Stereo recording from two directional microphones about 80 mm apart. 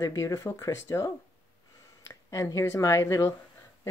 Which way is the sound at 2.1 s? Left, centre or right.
Left.